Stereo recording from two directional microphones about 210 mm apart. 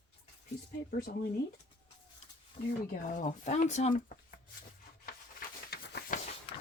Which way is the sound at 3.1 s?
35° left (ahead or behind).